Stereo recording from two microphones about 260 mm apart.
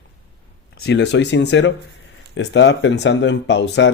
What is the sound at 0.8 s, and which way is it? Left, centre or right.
Speech, left.